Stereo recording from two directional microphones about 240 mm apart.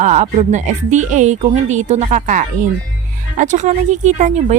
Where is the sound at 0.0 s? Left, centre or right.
Right.